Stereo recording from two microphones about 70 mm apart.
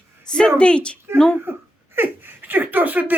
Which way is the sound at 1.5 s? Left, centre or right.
Right.